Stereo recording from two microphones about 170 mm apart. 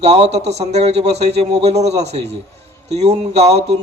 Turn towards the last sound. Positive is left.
turn(degrees=-40)  # may be behind; listen again after turning